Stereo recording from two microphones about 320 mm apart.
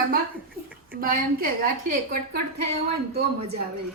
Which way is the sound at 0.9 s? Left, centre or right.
Right.